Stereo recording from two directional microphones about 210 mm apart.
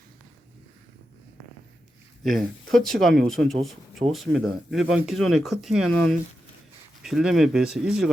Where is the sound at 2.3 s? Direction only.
Centre (ahead or behind).